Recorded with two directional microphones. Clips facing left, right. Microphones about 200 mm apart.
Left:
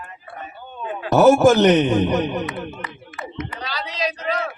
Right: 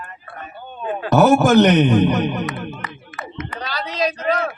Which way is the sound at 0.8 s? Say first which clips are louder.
Left 1 dB; 55° right (ahead or behind).